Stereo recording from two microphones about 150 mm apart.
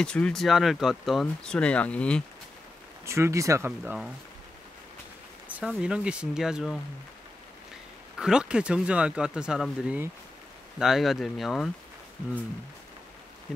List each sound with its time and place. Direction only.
0.0 s speech: 5° left (ahead or behind)
3.1 s speech: 20° right (ahead or behind)
5.5 s speech: 5° right (ahead or behind)
8.2 s speech: 5° right (ahead or behind)